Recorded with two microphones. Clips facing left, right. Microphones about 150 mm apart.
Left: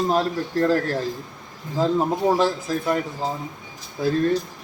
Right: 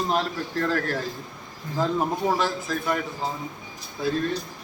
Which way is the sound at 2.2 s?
40° left (ahead or behind).